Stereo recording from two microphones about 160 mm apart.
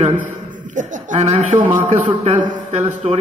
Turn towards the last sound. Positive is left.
turn(degrees=-50)  # may be behind; listen again after turning